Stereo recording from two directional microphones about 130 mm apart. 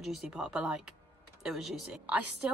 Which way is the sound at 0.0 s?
Centre (ahead or behind).